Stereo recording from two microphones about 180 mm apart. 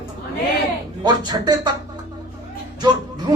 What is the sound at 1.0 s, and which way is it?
Speech, 20° right (ahead or behind).